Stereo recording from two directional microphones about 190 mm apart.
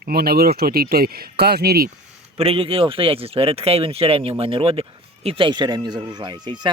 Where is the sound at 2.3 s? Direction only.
30° right (ahead or behind).